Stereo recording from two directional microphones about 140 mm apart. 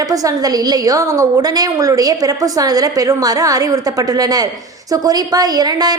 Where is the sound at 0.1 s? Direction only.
25° right (ahead or behind).